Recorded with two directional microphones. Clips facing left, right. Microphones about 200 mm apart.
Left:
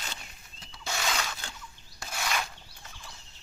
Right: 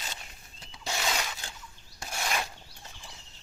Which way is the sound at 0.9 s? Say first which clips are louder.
Even; 15° right (ahead or behind).